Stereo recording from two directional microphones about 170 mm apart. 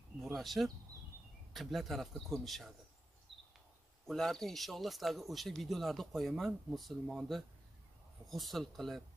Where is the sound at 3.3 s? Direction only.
30° right (ahead or behind).